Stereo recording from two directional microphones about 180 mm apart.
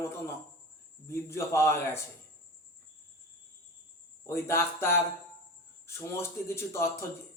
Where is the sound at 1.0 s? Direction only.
15° left (ahead or behind).